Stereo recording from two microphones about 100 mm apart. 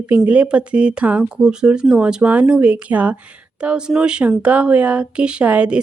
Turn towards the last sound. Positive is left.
turn(degrees=-15)  # may be behind; listen again after turning